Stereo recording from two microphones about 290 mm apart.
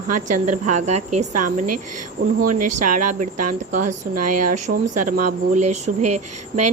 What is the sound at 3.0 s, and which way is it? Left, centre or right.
Speech, right.